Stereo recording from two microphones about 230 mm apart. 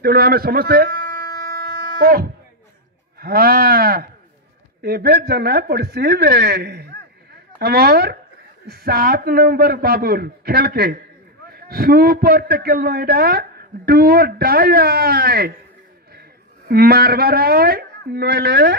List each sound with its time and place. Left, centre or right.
0.0 s a man's voice: right
2.0 s a man's voice: right
16.6 s a man's voice: right